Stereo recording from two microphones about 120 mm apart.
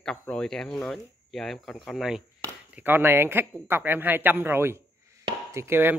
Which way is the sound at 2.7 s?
15° right (ahead or behind).